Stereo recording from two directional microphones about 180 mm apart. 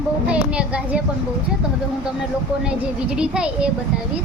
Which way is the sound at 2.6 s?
5° right (ahead or behind).